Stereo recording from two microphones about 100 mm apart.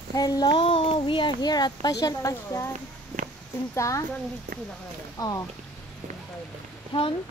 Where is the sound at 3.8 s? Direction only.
30° left (ahead or behind).